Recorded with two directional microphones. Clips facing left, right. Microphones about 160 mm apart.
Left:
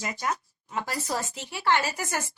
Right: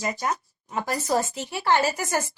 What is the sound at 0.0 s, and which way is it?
A woman's voice, 35° right (ahead or behind).